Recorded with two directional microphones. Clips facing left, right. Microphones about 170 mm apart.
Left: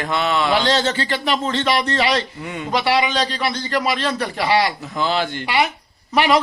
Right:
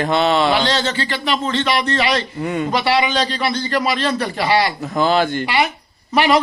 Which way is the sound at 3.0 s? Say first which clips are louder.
Right 1 dB; 5° right (ahead or behind).